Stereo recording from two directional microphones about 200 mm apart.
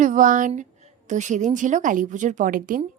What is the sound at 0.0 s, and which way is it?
A woman's voice, 40° right (ahead or behind).